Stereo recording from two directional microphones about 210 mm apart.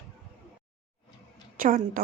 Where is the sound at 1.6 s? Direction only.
40° right (ahead or behind).